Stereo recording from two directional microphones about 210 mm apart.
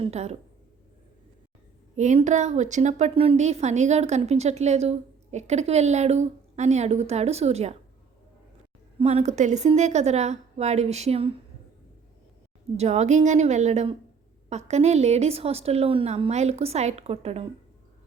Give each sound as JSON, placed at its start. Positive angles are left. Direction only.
{"t": 0.0, "sound": "a woman's voice", "side_deg": -30}
{"t": 2.0, "sound": "a woman's voice", "side_deg": -35}
{"t": 9.0, "sound": "a woman's voice", "side_deg": -30}
{"t": 12.7, "sound": "a woman's voice", "side_deg": -30}